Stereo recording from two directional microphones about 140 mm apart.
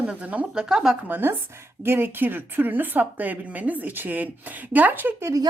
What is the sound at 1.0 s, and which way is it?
Speech, 15° right (ahead or behind).